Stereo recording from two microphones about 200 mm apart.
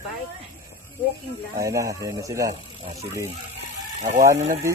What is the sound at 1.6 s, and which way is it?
Speech, 15° right (ahead or behind).